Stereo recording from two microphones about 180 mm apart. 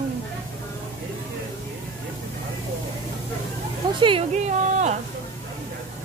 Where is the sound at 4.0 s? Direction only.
30° right (ahead or behind).